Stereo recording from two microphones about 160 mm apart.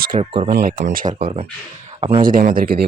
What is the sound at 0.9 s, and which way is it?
Speech, 55° right (ahead or behind).